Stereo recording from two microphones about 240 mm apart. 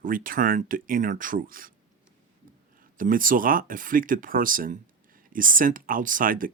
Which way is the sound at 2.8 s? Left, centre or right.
Right.